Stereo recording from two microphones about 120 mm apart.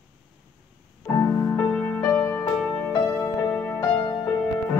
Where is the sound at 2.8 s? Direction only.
20° left (ahead or behind).